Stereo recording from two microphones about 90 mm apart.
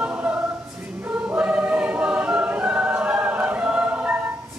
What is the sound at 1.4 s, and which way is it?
Choir, 15° right (ahead or behind).